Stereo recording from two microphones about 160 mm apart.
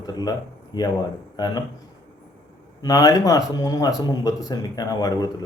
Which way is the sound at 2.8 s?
25° left (ahead or behind).